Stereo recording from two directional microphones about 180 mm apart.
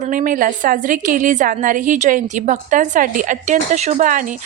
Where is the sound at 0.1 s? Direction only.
50° right (ahead or behind).